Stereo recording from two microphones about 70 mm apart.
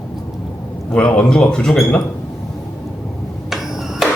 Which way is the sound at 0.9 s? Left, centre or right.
Centre.